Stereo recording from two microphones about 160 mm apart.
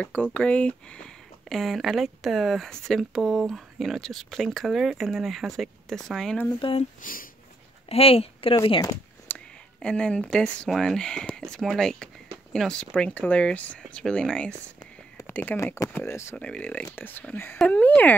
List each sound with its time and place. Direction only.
0.0 s speech: 10° left (ahead or behind)
7.0 s speech: 60° left (ahead or behind)
7.9 s speech: 35° left (ahead or behind)
9.3 s speech: 5° left (ahead or behind)